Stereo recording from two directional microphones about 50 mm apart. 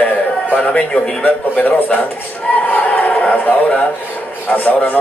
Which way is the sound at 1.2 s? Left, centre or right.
Left.